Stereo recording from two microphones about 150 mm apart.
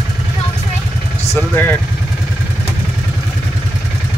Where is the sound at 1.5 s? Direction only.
15° left (ahead or behind).